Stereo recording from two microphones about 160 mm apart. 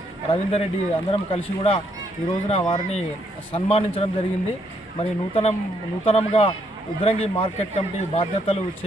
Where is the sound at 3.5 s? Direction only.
35° left (ahead or behind).